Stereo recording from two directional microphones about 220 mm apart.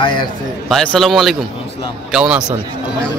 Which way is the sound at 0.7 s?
Centre (ahead or behind).